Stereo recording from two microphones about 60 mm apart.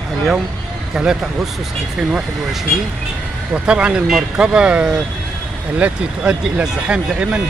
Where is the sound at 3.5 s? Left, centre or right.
Centre.